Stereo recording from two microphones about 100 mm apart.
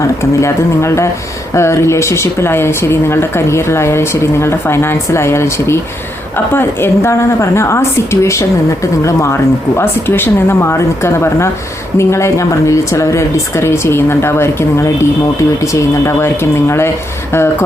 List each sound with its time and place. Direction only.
0.0 s a woman's voice: 30° left (ahead or behind)